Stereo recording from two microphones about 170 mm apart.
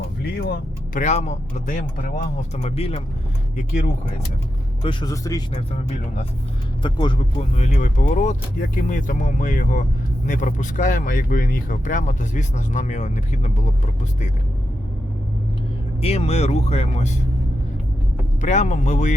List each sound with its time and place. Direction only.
0.2 s speech: 75° left (ahead or behind)
0.9 s speech: 45° left (ahead or behind)
4.8 s a man's voice: 30° left (ahead or behind)
6.8 s a man's voice: 30° left (ahead or behind)
7.5 s speech: 40° left (ahead or behind)
16.0 s speech: 35° left (ahead or behind)
18.4 s speech: 45° left (ahead or behind)